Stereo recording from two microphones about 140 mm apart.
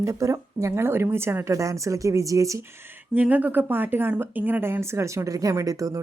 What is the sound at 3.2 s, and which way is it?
A woman's voice, 10° right (ahead or behind).